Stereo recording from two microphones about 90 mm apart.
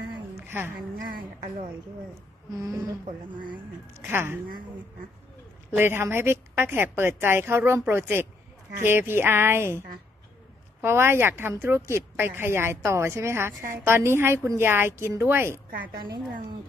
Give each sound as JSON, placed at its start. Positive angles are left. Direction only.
{"t": 0.4, "sound": "a sound", "side_deg": -25}
{"t": 2.5, "sound": "a woman's voice", "side_deg": -40}
{"t": 4.0, "sound": "speech", "side_deg": -25}
{"t": 5.8, "sound": "speech", "side_deg": -25}
{"t": 10.8, "sound": "speech", "side_deg": -30}